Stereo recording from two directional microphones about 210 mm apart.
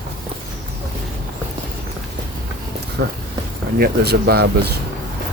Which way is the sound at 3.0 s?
55° right (ahead or behind).